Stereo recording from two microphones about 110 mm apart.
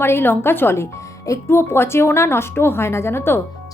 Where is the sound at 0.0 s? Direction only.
20° left (ahead or behind).